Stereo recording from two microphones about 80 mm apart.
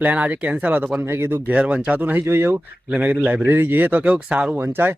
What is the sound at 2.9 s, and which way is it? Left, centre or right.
Speech, centre.